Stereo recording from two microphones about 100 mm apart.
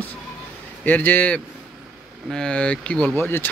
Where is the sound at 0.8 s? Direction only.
20° left (ahead or behind).